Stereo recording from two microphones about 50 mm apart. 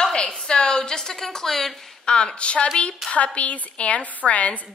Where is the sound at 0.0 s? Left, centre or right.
Centre.